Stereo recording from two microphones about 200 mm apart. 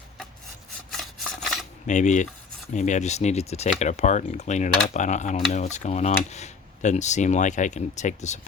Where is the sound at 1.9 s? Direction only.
35° left (ahead or behind).